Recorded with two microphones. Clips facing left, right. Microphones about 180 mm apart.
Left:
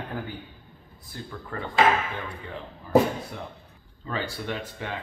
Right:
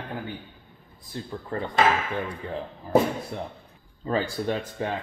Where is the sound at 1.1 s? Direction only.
25° right (ahead or behind).